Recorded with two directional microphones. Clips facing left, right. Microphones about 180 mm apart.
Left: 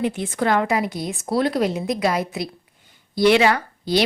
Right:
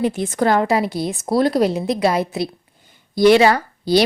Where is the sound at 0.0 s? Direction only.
40° right (ahead or behind).